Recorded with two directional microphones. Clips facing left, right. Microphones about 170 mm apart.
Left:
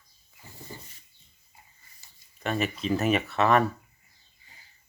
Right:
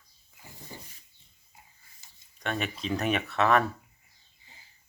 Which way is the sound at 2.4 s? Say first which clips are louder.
Left 4 dB; centre (ahead or behind).